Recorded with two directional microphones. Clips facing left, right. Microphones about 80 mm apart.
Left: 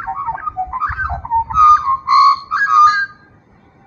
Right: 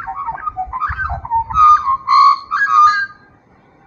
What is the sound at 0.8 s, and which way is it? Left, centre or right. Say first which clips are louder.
Bird: even; centre.